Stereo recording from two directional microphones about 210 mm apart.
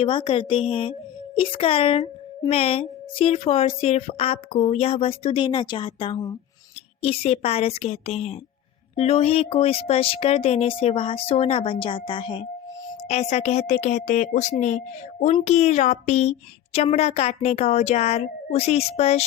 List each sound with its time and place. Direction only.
0.0 s a woman's voice: 25° left (ahead or behind)